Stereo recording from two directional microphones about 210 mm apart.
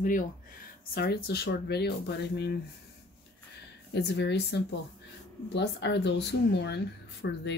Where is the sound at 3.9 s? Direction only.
55° left (ahead or behind).